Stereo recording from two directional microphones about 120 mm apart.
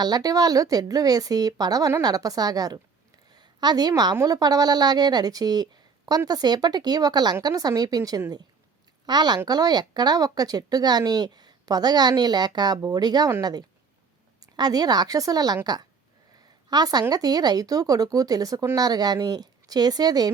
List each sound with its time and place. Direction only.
0.0 s speech: 35° right (ahead or behind)